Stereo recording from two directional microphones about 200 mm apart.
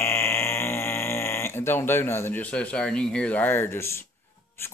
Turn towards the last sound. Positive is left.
turn(degrees=10)  # may be behind; listen again after turning